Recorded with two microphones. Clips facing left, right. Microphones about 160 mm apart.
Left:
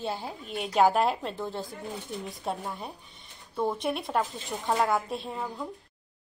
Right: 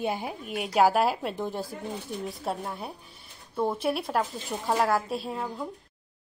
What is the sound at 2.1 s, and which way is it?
A woman's voice, centre (ahead or behind).